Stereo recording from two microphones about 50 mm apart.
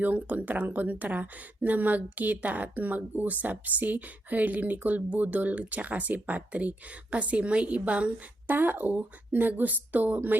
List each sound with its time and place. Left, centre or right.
0.0 s speech: right
8.5 s speech: right